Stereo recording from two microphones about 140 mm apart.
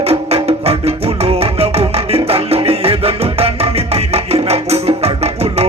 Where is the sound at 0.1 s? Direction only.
45° right (ahead or behind).